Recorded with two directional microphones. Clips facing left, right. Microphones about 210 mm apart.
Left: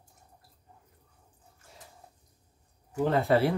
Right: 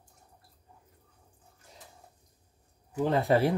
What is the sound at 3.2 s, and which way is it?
Speech, 15° right (ahead or behind).